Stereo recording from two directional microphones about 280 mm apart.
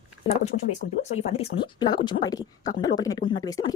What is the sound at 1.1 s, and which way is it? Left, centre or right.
Speech, left.